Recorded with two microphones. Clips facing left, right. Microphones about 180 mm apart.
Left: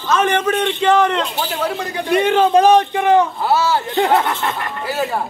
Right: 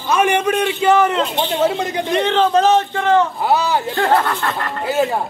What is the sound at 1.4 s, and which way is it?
Speech, 25° right (ahead or behind).